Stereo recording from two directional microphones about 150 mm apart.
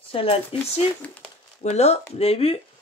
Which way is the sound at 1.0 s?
10° left (ahead or behind).